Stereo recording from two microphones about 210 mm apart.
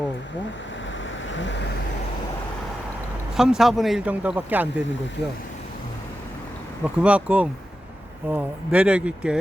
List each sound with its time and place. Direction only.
1.3 s vehicle: 60° left (ahead or behind)
3.3 s a man's voice: centre (ahead or behind)
6.8 s a man's voice: 5° right (ahead or behind)